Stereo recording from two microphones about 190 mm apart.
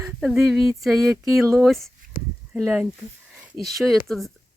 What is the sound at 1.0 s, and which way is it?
Speech, 15° right (ahead or behind).